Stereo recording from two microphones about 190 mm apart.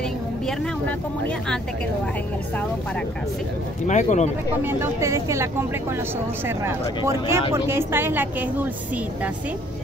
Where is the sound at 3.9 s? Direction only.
40° left (ahead or behind).